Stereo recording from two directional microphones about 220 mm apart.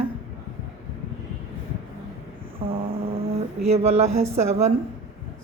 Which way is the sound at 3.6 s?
30° right (ahead or behind).